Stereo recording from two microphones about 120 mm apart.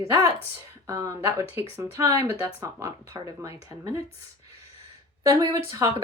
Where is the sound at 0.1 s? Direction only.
25° right (ahead or behind).